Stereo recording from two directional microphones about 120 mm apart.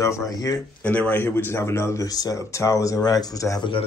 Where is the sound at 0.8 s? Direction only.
10° left (ahead or behind); by 3.6 s 30° left (ahead or behind).